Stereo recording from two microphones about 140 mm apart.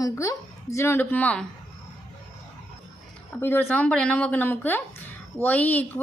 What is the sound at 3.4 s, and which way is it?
A woman's voice, 15° left (ahead or behind).